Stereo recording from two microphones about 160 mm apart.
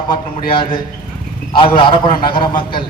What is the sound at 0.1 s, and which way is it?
A man's voice, 30° left (ahead or behind).